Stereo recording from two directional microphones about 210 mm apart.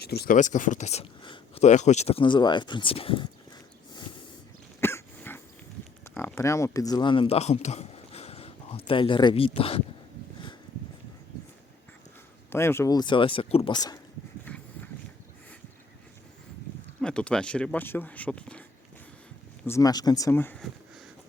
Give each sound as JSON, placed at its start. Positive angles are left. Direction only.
{"t": 0.0, "sound": "speech", "side_deg": 50}
{"t": 4.8, "sound": "cough", "side_deg": 10}
{"t": 6.1, "sound": "speech", "side_deg": 10}
{"t": 12.5, "sound": "speech", "side_deg": 10}
{"t": 17.0, "sound": "speech", "side_deg": 5}
{"t": 19.6, "sound": "speech", "side_deg": 15}